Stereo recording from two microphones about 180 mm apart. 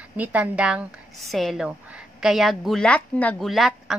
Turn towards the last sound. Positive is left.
turn(degrees=0)  # may be behind; listen again after turning